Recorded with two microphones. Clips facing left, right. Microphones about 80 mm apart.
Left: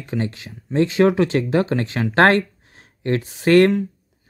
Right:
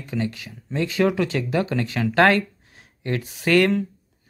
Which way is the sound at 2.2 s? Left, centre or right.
Left.